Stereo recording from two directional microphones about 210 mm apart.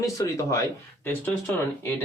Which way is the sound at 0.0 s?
15° left (ahead or behind).